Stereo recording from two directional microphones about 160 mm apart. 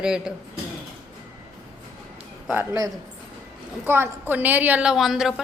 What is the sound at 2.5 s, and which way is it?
A woman's voice, 15° right (ahead or behind).